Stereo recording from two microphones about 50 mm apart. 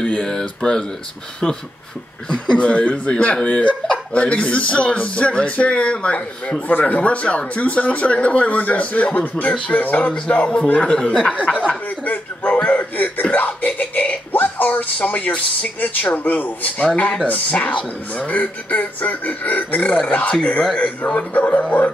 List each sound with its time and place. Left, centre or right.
0.0 s speech: centre
12.0 s speech: left